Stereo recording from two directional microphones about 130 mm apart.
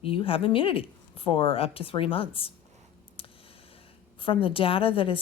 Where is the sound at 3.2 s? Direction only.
45° left (ahead or behind).